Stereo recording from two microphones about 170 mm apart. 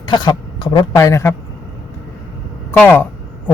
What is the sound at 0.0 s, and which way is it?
Speech, 25° left (ahead or behind).